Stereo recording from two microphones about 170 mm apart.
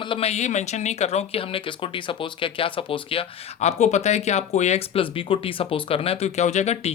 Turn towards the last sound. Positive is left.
turn(degrees=40)  # may be behind; listen again after turning